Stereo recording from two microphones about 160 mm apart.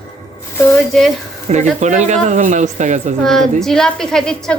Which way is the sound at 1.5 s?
40° right (ahead or behind).